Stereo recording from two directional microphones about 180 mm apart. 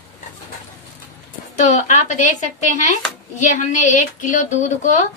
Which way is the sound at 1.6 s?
45° left (ahead or behind).